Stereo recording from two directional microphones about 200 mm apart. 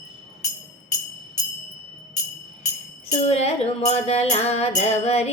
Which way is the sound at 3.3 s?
30° left (ahead or behind).